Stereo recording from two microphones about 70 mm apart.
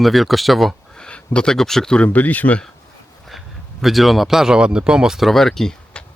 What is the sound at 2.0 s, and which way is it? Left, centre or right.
Speech, left.